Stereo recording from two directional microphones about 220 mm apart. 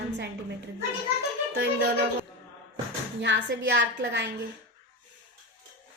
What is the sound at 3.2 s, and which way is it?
A woman's voice, 55° right (ahead or behind).